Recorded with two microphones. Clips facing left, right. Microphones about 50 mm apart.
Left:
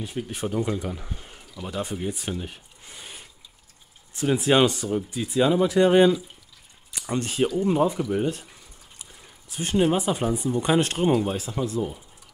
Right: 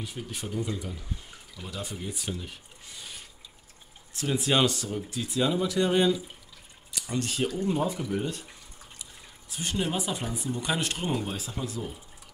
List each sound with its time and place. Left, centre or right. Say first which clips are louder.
0.0 s speech: left 7 dB; left
1.6 s speech: left 7 dB; left
6.9 s a sound: left 3 dB; left
7.8 s speech: left 6 dB; centre
9.5 s speech: left 8 dB; left